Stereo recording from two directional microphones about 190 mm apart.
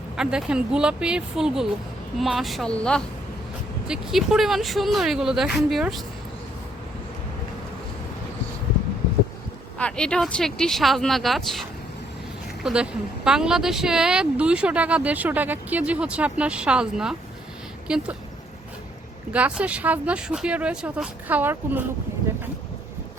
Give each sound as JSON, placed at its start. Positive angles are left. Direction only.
{"t": 0.2, "sound": "speech", "side_deg": -5}
{"t": 9.7, "sound": "speech", "side_deg": 5}
{"t": 12.6, "sound": "speech", "side_deg": -5}
{"t": 19.3, "sound": "speech", "side_deg": -5}